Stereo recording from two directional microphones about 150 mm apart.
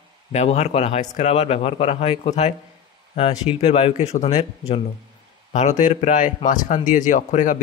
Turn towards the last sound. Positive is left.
turn(degrees=55)  # may be behind; listen again after turning